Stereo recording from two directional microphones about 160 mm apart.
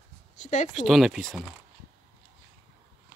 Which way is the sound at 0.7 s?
Centre (ahead or behind).